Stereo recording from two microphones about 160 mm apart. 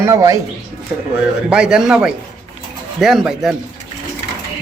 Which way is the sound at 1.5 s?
5° right (ahead or behind).